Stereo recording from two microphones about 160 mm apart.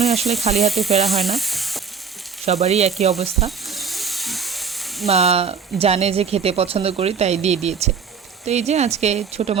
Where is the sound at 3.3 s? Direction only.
Centre (ahead or behind).